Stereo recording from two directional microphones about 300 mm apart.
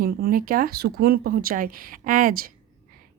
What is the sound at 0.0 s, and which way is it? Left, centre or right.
A woman's voice, right.